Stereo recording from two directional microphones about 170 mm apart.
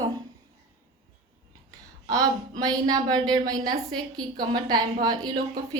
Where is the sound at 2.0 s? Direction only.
25° right (ahead or behind).